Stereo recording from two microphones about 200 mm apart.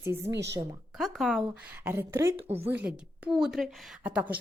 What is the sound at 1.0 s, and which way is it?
A woman's voice, centre (ahead or behind).